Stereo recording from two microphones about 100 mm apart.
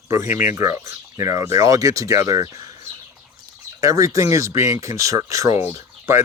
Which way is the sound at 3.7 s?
35° right (ahead or behind).